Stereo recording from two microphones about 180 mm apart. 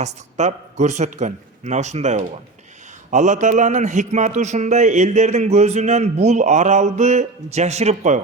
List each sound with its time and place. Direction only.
0.0 s a man's voice: 40° right (ahead or behind)